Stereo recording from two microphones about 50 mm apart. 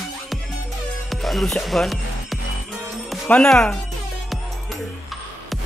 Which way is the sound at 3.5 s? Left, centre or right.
Centre.